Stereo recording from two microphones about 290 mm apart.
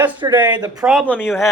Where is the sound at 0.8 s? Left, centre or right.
Centre.